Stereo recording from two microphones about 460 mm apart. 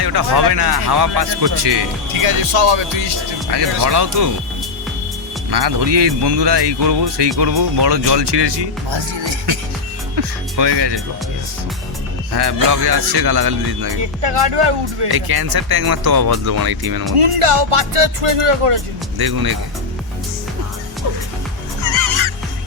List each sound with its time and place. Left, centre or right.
0.0 s speech: right
2.2 s speech: right
5.5 s speech: right
10.2 s speech: right
12.3 s speech: right
14.0 s music: right
15.0 s speech: right
17.2 s music: right
19.2 s speech: right
21.8 s music: right